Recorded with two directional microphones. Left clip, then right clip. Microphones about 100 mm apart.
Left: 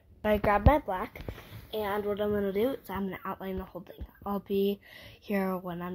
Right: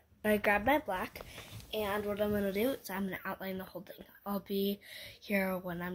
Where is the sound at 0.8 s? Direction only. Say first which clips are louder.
Left 3 dB; 25° left (ahead or behind).